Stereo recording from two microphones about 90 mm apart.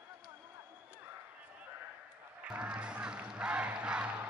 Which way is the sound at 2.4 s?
15° right (ahead or behind).